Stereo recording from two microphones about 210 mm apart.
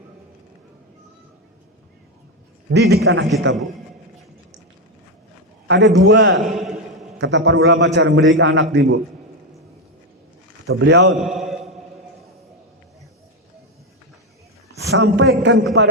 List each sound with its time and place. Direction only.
2.6 s a man's voice: 50° right (ahead or behind)
5.6 s a man's voice: 55° right (ahead or behind)
6.3 s a sound: centre (ahead or behind)
7.2 s a man's voice: 60° right (ahead or behind)
10.8 s a man's voice: 55° right (ahead or behind)
11.2 s mantra: centre (ahead or behind)
14.8 s a sound: 50° right (ahead or behind)
15.0 s a man's voice: 90° right
15.8 s a man's voice: 55° right (ahead or behind)